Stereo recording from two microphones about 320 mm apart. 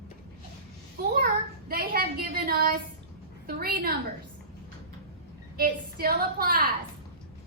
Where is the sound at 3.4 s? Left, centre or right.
Right.